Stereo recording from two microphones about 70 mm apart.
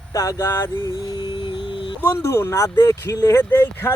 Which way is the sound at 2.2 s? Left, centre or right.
Left.